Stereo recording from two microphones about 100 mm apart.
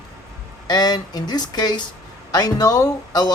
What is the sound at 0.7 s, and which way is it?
Speech, 45° left (ahead or behind).